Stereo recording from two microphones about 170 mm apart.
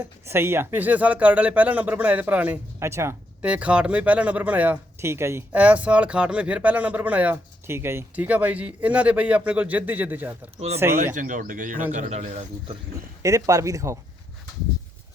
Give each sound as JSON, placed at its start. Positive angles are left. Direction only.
{"t": 0.3, "sound": "speech", "side_deg": -15}
{"t": 10.9, "sound": "speech", "side_deg": -50}
{"t": 13.2, "sound": "speech", "side_deg": -20}